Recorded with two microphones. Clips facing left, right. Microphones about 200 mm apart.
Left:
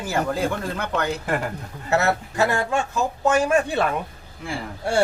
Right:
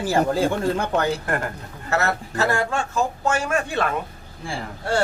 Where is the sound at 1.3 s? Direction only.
Centre (ahead or behind).